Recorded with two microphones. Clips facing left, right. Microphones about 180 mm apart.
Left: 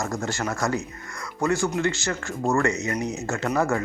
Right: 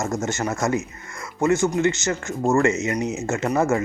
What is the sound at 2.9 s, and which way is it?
Speech, 10° right (ahead or behind).